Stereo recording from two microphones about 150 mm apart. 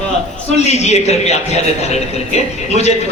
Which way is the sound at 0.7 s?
45° left (ahead or behind).